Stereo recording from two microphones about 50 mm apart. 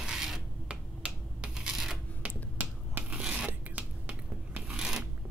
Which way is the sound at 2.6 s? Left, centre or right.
Right.